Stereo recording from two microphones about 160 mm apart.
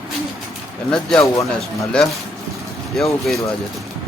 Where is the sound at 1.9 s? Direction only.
Centre (ahead or behind).